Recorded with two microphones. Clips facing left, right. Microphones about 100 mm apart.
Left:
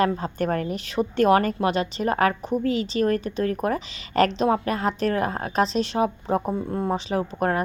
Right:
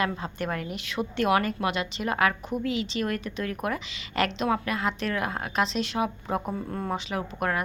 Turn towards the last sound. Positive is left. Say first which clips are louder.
# left 5 dB
turn(degrees=35)  # may be behind; listen again after turning